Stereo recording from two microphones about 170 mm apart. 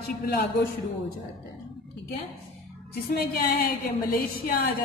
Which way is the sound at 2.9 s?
65° left (ahead or behind).